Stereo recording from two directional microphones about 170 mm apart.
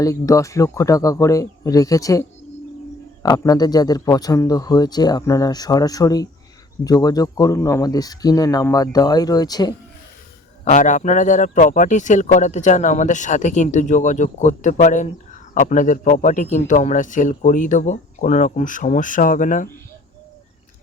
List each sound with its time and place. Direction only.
0.0 s speech: 20° left (ahead or behind)
3.2 s speech: 20° left (ahead or behind)
10.7 s a man's voice: 50° left (ahead or behind)